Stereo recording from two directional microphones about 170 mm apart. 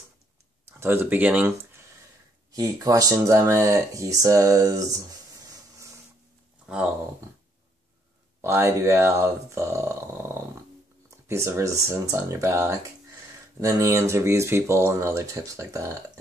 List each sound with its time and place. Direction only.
0.7 s speech: 15° right (ahead or behind)
8.4 s speech: 15° right (ahead or behind)